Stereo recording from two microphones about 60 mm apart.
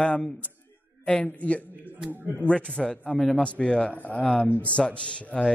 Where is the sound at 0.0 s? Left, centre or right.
Left.